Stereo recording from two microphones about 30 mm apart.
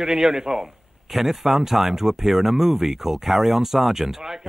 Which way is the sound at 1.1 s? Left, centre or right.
Centre.